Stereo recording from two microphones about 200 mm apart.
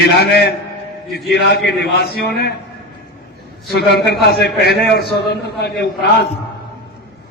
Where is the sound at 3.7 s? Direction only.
50° left (ahead or behind).